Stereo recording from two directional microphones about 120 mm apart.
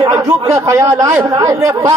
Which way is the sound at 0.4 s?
30° right (ahead or behind).